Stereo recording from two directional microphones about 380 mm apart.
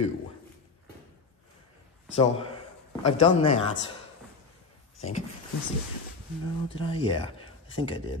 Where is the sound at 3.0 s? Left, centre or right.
Centre.